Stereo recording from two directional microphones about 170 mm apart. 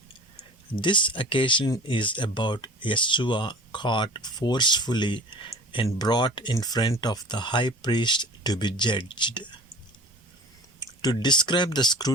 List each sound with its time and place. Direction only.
0.7 s speech: 30° left (ahead or behind)
10.8 s speech: 25° left (ahead or behind)